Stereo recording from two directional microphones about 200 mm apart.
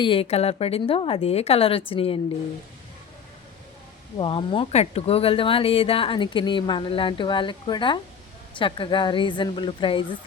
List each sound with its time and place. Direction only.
0.0 s speech: 25° left (ahead or behind)
4.2 s speech: 25° left (ahead or behind)